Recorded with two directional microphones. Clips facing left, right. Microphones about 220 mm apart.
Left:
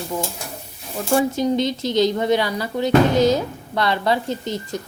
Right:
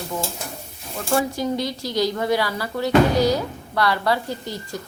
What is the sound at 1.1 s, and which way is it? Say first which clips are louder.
Speech: left 4 dB; 20° left (ahead or behind).